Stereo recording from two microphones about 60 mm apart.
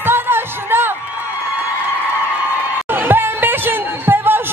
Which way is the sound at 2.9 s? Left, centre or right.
Right.